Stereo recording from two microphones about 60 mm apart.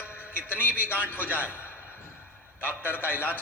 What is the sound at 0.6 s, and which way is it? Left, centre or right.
A man's voice, left.